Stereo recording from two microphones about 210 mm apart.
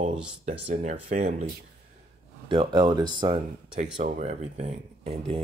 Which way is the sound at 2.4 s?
20° right (ahead or behind).